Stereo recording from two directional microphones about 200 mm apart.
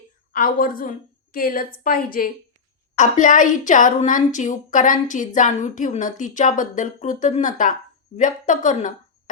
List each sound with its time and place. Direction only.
0.3 s a woman's voice: 45° left (ahead or behind)